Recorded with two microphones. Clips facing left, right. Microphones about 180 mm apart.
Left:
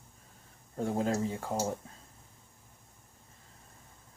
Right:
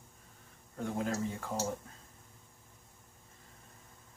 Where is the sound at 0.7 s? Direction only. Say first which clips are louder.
Left 4 dB; 30° left (ahead or behind).